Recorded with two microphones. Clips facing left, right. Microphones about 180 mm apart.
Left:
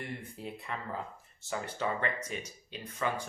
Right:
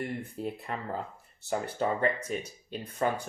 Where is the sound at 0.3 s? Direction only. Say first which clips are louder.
Right 5 dB; 45° right (ahead or behind).